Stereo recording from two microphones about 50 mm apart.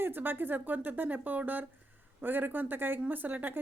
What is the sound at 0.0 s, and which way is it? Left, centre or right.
Speech, right.